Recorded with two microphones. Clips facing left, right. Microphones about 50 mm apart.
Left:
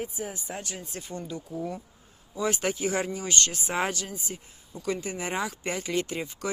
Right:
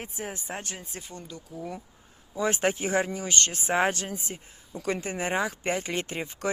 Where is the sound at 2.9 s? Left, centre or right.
Right.